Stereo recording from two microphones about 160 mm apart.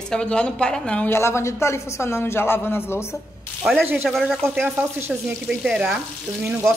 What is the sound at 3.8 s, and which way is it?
A woman's voice, 10° right (ahead or behind).